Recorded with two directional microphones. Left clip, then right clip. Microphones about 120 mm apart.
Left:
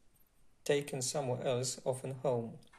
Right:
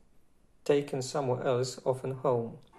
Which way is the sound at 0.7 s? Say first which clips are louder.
Right 5 dB; 30° left (ahead or behind).